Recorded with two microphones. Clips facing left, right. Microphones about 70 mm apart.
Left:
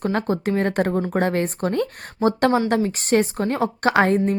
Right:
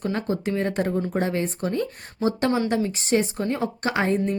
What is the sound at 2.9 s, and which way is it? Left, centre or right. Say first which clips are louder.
A woman's voice: left 3 dB; left.